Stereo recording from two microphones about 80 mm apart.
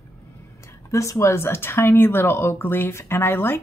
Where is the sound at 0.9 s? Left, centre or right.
Left.